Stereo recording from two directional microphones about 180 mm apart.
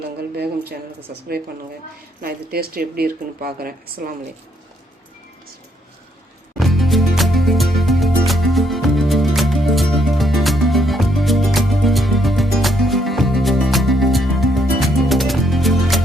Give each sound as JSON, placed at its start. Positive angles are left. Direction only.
{"t": 0.2, "sound": "speech", "side_deg": -60}
{"t": 2.2, "sound": "speech", "side_deg": -55}
{"t": 6.6, "sound": "music", "side_deg": 0}